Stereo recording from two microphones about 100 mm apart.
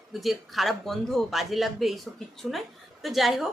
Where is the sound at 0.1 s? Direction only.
Centre (ahead or behind).